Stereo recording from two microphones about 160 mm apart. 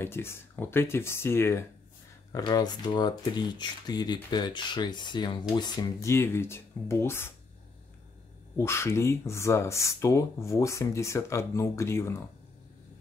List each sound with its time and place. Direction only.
0.0 s speech: 15° left (ahead or behind)
8.5 s speech: 15° left (ahead or behind)